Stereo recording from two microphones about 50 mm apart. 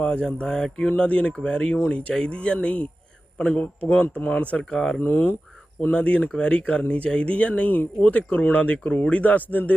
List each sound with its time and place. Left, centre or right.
0.0 s speech: centre
0.9 s speech: left
4.7 s speech: centre
4.9 s speech: left
5.9 s speech: left